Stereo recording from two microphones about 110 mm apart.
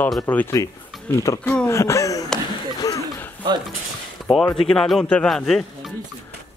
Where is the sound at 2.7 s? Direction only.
35° left (ahead or behind).